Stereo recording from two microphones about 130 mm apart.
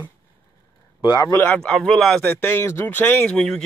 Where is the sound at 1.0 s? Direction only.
35° left (ahead or behind).